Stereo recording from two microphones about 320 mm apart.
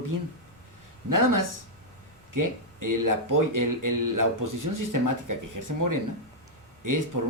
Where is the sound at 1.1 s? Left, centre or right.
Right.